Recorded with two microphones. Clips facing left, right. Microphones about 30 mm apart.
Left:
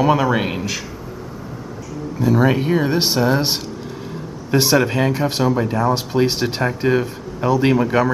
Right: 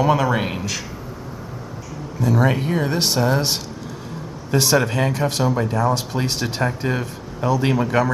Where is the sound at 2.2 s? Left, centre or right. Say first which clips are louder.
Left 3 dB; centre.